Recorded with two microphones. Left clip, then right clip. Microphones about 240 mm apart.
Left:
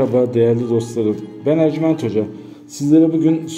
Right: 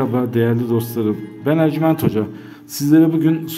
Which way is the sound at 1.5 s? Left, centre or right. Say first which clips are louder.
Left 1 dB; right.